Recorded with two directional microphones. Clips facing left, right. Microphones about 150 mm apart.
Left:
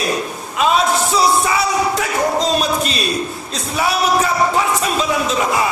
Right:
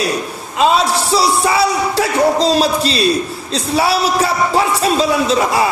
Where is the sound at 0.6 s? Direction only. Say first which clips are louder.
Right 2 dB; 35° right (ahead or behind).